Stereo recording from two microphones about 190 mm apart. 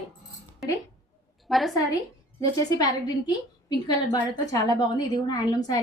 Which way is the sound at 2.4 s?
20° left (ahead or behind).